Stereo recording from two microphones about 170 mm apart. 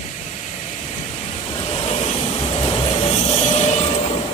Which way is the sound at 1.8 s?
40° left (ahead or behind).